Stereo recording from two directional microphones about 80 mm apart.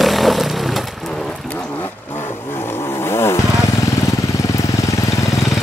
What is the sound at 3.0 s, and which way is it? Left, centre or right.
Motorcycle, left.